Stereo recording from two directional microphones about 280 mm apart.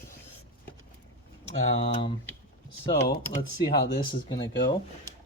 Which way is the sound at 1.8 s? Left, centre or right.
Centre.